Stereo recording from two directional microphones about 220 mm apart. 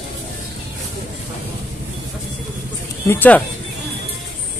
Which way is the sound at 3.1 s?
10° left (ahead or behind).